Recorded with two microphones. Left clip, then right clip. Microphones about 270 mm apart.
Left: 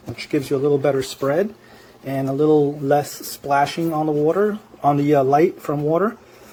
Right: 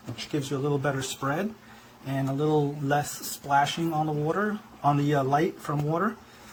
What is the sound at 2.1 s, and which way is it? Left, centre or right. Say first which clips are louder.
Speech: left 9 dB; left.